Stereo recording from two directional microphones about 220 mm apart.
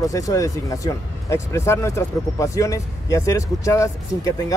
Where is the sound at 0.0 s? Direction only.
15° left (ahead or behind).